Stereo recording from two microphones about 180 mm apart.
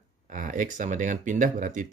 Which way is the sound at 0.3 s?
45° right (ahead or behind).